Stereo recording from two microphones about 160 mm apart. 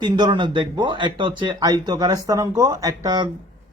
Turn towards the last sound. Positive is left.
turn(degrees=-25)  # may be behind; listen again after turning